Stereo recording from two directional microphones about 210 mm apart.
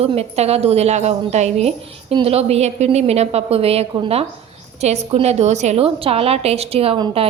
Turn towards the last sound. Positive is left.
turn(degrees=-25)  # may be behind; listen again after turning